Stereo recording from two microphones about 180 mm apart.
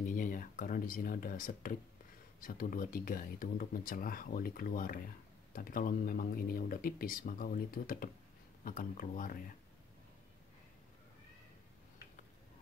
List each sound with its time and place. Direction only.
0.0 s speech: 50° left (ahead or behind)